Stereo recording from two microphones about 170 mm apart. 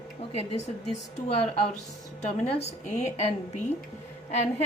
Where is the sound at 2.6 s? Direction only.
40° left (ahead or behind).